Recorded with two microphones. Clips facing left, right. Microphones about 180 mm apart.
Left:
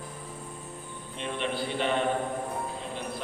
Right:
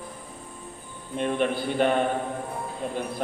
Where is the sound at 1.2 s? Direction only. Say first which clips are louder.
Right 7 dB; 50° right (ahead or behind).